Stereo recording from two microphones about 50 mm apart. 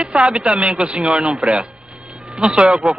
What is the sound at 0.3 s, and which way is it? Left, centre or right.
Speech, centre.